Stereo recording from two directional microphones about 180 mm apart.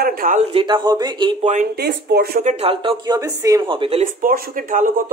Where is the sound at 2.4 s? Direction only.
35° right (ahead or behind).